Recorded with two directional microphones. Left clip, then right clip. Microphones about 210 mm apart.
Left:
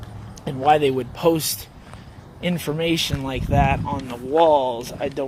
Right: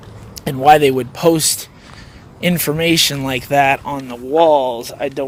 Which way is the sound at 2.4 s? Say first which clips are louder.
Right 7 dB; 45° right (ahead or behind).